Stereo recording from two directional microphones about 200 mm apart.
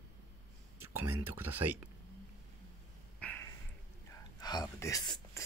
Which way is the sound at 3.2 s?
10° left (ahead or behind).